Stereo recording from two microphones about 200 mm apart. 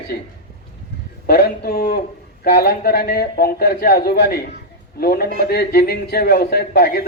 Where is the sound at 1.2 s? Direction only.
55° left (ahead or behind).